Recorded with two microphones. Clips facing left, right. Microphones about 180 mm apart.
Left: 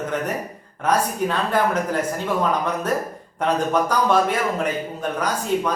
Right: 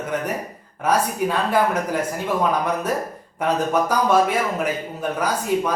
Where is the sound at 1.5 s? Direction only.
10° right (ahead or behind).